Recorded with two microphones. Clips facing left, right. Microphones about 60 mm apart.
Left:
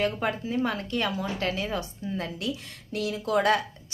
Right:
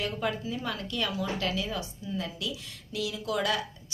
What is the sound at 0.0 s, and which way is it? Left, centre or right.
Speech, left.